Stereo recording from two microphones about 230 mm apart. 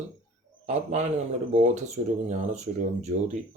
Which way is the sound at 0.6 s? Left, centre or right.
Right.